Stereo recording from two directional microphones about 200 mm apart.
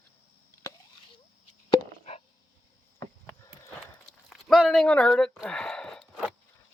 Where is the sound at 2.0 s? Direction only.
35° left (ahead or behind).